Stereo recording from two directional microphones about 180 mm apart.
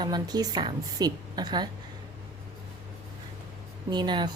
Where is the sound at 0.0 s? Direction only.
20° right (ahead or behind).